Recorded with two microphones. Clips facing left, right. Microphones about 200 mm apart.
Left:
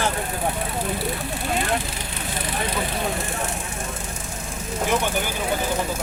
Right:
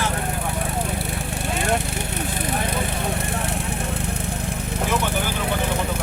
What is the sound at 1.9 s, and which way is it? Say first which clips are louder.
Vehicle: right 4 dB; 60° right (ahead or behind).